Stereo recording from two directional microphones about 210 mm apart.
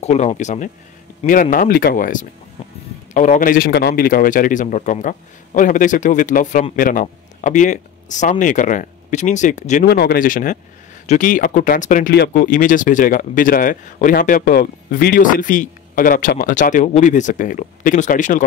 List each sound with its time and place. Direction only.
0.0 s speech: 30° left (ahead or behind)
9.8 s speech: 50° left (ahead or behind)